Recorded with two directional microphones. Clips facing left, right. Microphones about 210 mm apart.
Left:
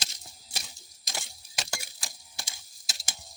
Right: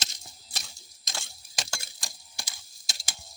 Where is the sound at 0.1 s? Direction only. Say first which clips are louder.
Left 1 dB; 10° left (ahead or behind).